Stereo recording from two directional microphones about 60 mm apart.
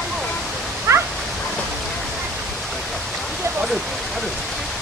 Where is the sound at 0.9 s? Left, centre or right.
Right.